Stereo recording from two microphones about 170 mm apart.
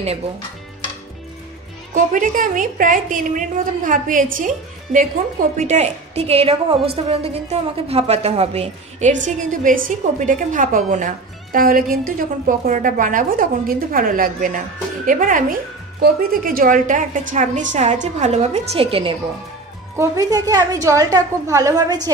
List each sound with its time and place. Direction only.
2.0 s a woman's voice: 50° right (ahead or behind)
5.6 s a woman's voice: 40° right (ahead or behind)
20.0 s a woman's voice: 20° right (ahead or behind)